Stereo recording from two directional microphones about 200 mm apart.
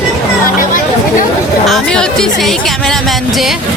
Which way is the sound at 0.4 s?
45° left (ahead or behind).